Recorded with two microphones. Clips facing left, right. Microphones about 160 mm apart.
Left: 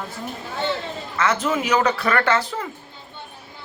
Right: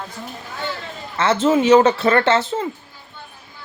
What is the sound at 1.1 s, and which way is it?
Speech, 30° right (ahead or behind).